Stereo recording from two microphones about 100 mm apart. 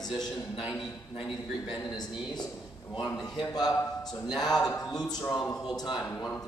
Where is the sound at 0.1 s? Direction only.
50° left (ahead or behind).